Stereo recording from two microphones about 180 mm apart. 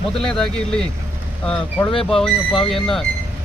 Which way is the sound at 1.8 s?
30° left (ahead or behind).